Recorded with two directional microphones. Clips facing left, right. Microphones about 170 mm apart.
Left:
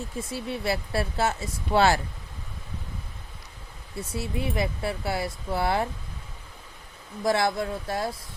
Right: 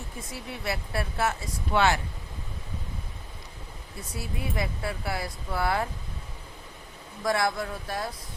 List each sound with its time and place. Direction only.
0.2 s speech: 30° left (ahead or behind)
4.1 s speech: 25° left (ahead or behind)
7.3 s speech: 25° left (ahead or behind)